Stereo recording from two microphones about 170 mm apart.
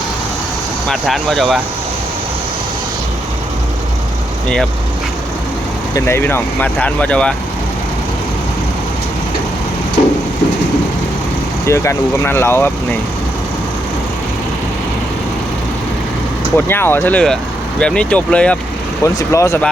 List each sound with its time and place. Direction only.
0.9 s speech: centre (ahead or behind)
5.9 s speech: 15° left (ahead or behind)
11.6 s speech: 15° left (ahead or behind)
16.6 s speech: 15° left (ahead or behind)
19.0 s speech: 20° left (ahead or behind)